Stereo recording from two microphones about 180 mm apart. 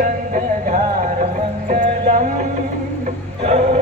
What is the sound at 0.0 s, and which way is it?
Music, 45° right (ahead or behind).